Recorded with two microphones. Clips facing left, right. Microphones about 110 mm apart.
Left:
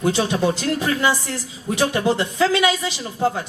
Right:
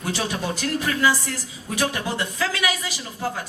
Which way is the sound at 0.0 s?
25° left (ahead or behind).